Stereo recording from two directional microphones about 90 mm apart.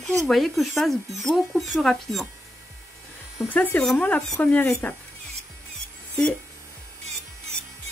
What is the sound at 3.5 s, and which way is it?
Speech, 20° left (ahead or behind).